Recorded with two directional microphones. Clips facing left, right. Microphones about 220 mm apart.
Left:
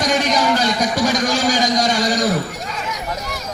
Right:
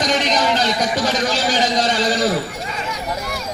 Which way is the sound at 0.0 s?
10° left (ahead or behind).